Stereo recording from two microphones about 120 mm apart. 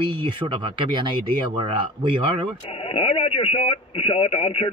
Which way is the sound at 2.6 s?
55° left (ahead or behind).